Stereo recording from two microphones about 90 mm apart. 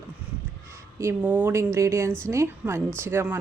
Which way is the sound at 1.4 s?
30° right (ahead or behind).